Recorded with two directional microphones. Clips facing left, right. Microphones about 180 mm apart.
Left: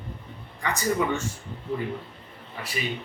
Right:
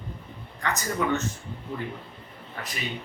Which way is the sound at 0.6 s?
10° left (ahead or behind).